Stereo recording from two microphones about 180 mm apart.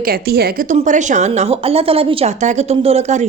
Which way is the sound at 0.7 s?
45° right (ahead or behind).